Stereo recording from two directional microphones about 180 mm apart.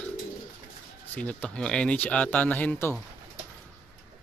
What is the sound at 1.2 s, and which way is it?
Speech, 5° left (ahead or behind).